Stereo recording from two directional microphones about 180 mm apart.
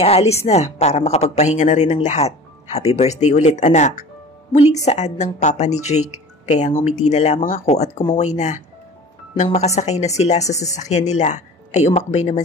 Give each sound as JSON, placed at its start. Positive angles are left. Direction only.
{"t": 0.0, "sound": "speech", "side_deg": 35}